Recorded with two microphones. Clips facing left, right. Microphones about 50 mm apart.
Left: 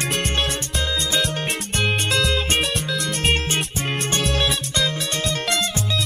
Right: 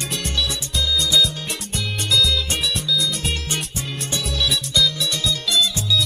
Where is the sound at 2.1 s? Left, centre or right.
Left.